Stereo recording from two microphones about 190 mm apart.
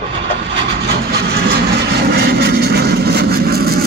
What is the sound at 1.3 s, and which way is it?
Vehicle, 55° right (ahead or behind).